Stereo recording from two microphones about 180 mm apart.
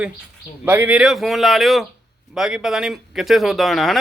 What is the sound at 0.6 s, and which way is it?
Speech, 10° right (ahead or behind).